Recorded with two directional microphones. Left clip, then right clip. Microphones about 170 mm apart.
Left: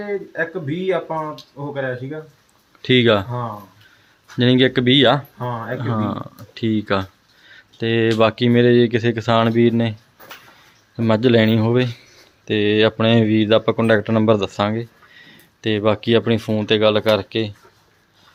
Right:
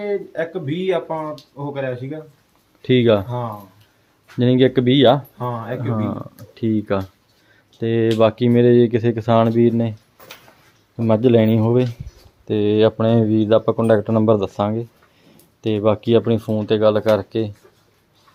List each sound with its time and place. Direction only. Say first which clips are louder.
0.3 s speech: even; 25° right (ahead or behind)
1.0 s speech: even; 10° right (ahead or behind)
1.7 s speech: left 1 dB; 25° right (ahead or behind)
2.8 s speech: even; 10° right (ahead or behind)
5.8 s speech: left 1 dB; 5° right (ahead or behind)
10.9 s speech: even; 10° right (ahead or behind)